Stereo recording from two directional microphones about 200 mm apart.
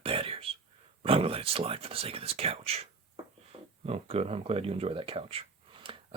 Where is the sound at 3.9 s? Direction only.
30° right (ahead or behind).